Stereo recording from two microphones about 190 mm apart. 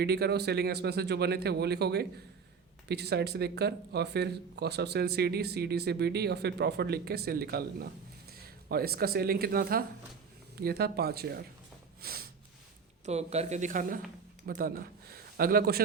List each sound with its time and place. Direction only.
0.0 s speech: 60° right (ahead or behind)
13.1 s speech: 35° right (ahead or behind); by 15.8 s 55° right (ahead or behind)